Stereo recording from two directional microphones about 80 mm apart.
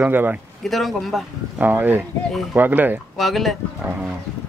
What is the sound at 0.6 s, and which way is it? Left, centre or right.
Speech, centre.